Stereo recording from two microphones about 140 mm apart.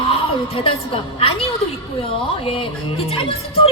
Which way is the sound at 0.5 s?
45° left (ahead or behind).